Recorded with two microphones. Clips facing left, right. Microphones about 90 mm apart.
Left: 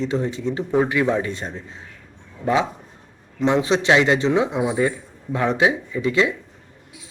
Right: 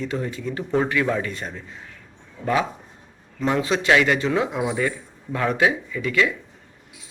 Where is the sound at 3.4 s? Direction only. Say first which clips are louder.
Left 3 dB; 25° left (ahead or behind).